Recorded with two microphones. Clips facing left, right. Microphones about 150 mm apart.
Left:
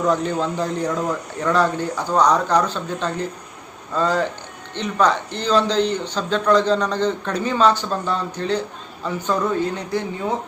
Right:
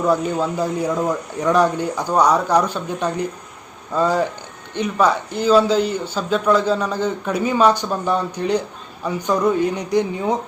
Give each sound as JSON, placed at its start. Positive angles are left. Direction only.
{"t": 0.0, "sound": "speech", "side_deg": -10}